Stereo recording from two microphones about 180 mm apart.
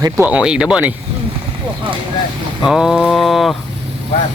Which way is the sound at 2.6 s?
5° right (ahead or behind).